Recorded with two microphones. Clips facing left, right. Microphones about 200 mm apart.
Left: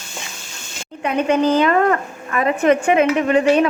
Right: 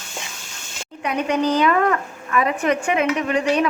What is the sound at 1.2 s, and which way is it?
Speech, 25° left (ahead or behind).